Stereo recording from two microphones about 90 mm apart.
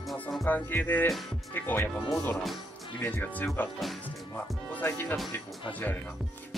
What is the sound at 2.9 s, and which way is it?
Speech, 20° left (ahead or behind).